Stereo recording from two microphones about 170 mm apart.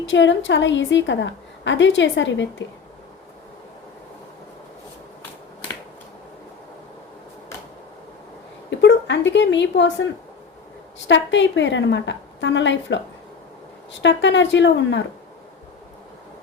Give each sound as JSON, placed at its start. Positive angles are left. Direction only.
{"t": 0.0, "sound": "a woman's voice", "side_deg": 90}
{"t": 8.7, "sound": "a sound", "side_deg": 90}
{"t": 11.1, "sound": "a woman's voice", "side_deg": 90}
{"t": 14.0, "sound": "a woman's voice", "side_deg": 90}